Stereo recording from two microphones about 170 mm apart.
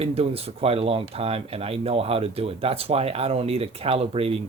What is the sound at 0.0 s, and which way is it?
Speech, 35° right (ahead or behind).